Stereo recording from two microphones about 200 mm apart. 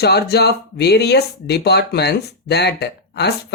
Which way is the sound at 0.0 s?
55° left (ahead or behind).